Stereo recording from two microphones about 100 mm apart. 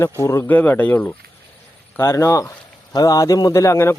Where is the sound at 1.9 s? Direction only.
25° left (ahead or behind).